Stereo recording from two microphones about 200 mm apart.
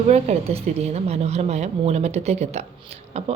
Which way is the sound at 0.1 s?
30° right (ahead or behind).